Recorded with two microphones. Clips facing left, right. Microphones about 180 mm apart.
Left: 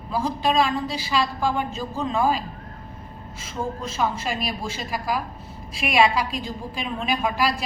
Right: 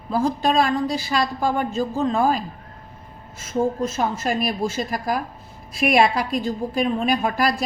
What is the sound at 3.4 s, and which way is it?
A woman's voice, 50° right (ahead or behind).